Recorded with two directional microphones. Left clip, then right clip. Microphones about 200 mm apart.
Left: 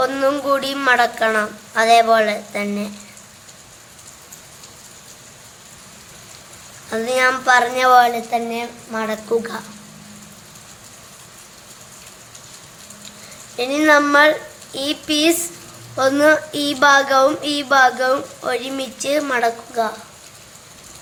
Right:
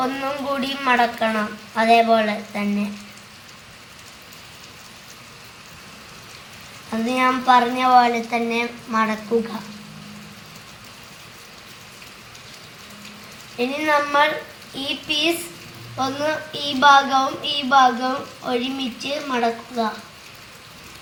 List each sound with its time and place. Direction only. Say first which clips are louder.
0.2 s child singing: left 7 dB; 20° left (ahead or behind)
7.2 s a woman's voice: left 1 dB; 25° left (ahead or behind)
13.6 s child singing: left 6 dB; 25° left (ahead or behind)